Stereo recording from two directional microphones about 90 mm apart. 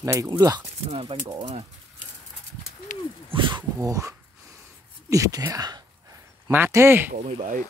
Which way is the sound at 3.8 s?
35° right (ahead or behind).